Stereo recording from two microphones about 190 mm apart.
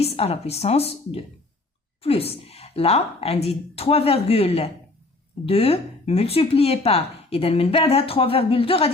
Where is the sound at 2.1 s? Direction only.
30° left (ahead or behind).